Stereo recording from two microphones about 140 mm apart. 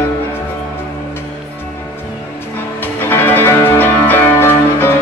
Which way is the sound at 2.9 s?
15° left (ahead or behind).